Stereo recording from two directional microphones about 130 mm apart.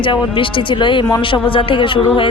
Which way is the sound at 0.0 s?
40° left (ahead or behind).